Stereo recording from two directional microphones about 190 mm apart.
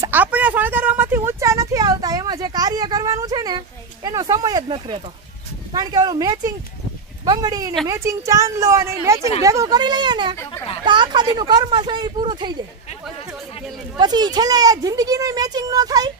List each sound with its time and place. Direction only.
0.0 s a sound: 10° right (ahead or behind); by 5.0 s 25° right (ahead or behind)
5.7 s a woman's voice: 20° right (ahead or behind)
13.9 s speech: 20° right (ahead or behind)